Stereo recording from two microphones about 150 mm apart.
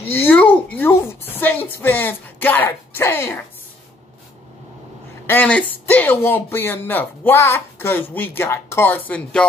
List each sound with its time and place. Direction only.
0.0 s speech: 15° left (ahead or behind)
5.2 s speech: 10° left (ahead or behind)